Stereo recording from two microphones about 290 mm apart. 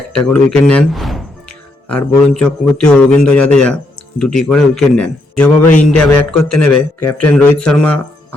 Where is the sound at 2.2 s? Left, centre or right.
Centre.